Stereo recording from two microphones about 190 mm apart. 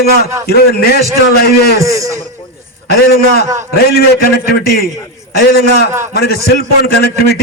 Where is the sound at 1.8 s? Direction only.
15° right (ahead or behind).